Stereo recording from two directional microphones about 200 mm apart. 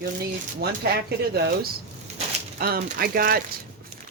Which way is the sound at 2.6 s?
45° right (ahead or behind).